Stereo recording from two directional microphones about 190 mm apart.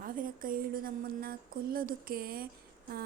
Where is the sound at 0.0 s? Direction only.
45° right (ahead or behind).